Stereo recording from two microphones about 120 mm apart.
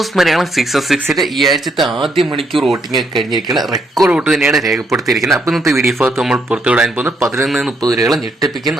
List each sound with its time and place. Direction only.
0.2 s speech: centre (ahead or behind)
7.8 s speech: 30° right (ahead or behind)